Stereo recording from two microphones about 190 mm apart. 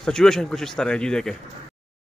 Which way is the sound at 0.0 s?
5° left (ahead or behind).